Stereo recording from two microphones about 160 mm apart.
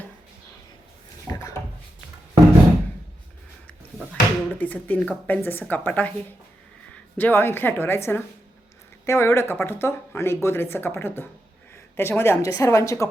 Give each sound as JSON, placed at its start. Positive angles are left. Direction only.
{"t": 1.3, "sound": "drawer open or close", "side_deg": 20}
{"t": 4.1, "sound": "speech", "side_deg": 10}
{"t": 7.2, "sound": "speech", "side_deg": 15}